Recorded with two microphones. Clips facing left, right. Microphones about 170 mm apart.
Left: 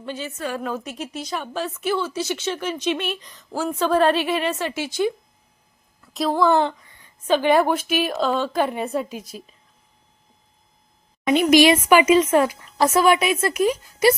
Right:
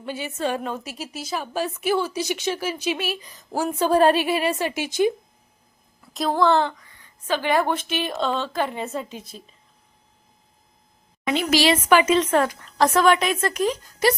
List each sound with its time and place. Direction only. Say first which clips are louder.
0.0 s a woman's voice: even; 10° right (ahead or behind)
0.3 s a woman's voice: right 6 dB; 25° right (ahead or behind)
0.6 s speech: left 2 dB; centre (ahead or behind)
3.8 s a woman's voice: right 1 dB; 40° right (ahead or behind)
4.1 s speech: even; 10° right (ahead or behind)
6.1 s a woman's voice: left 1 dB; centre (ahead or behind)
6.5 s a woman's voice: left 1 dB; 20° left (ahead or behind)
11.3 s a woman's voice: left 5 dB; 15° left (ahead or behind)